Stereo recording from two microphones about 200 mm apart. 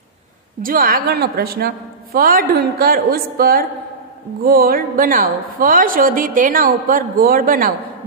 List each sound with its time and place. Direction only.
0.6 s a woman's voice: 45° right (ahead or behind)